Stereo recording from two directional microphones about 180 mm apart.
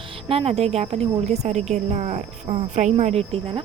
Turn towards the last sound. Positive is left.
turn(degrees=-30)  # may be behind; listen again after turning